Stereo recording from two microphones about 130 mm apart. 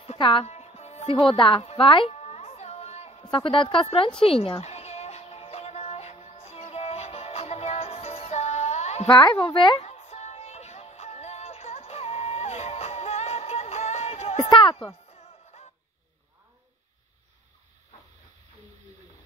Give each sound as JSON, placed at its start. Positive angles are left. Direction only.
{"t": 0.0, "sound": "music", "side_deg": 45}
{"t": 0.5, "sound": "music", "side_deg": 55}
{"t": 1.1, "sound": "music", "side_deg": 35}
{"t": 3.3, "sound": "a woman's voice", "side_deg": 40}
{"t": 4.2, "sound": "music", "side_deg": 45}
{"t": 9.0, "sound": "speech", "side_deg": 40}
{"t": 9.8, "sound": "music", "side_deg": 55}
{"t": 14.5, "sound": "speech", "side_deg": 40}
{"t": 15.0, "sound": "music", "side_deg": 55}